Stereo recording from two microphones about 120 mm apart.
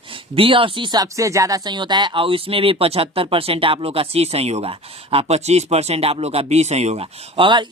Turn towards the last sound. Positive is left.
turn(degrees=-45)  # may be behind; listen again after turning